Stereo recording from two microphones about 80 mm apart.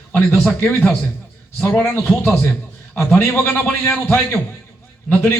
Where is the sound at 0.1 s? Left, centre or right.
Left.